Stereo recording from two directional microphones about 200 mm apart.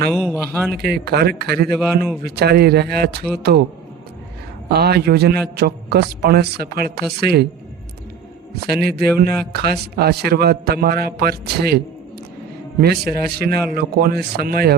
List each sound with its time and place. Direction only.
0.1 s speech: 5° left (ahead or behind)
0.7 s a man's voice: 50° right (ahead or behind)
4.7 s a man's voice: 50° right (ahead or behind)
8.6 s a man's voice: 50° right (ahead or behind)
12.8 s a man's voice: 50° right (ahead or behind)